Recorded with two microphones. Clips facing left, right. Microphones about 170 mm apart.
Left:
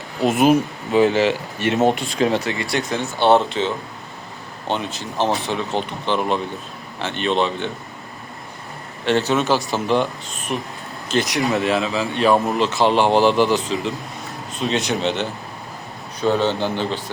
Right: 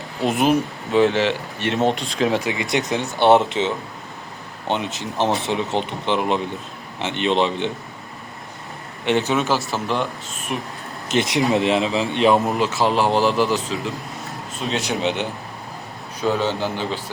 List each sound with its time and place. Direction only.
0.2 s speech: 5° left (ahead or behind)
2.4 s speech: 15° right (ahead or behind)
4.7 s speech: 20° right (ahead or behind)
9.0 s speech: 15° right (ahead or behind)
11.1 s speech: 25° right (ahead or behind)
12.5 s speech: 5° right (ahead or behind)